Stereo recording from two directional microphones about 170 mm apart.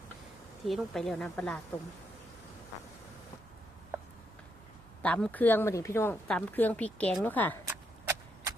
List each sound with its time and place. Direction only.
0.7 s a woman's voice: centre (ahead or behind)
5.0 s speech: 10° left (ahead or behind)
7.6 s a sound: 15° right (ahead or behind)